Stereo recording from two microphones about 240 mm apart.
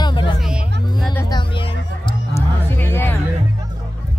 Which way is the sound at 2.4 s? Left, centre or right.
Centre.